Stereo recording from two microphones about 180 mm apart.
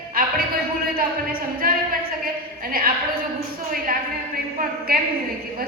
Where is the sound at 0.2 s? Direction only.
55° right (ahead or behind).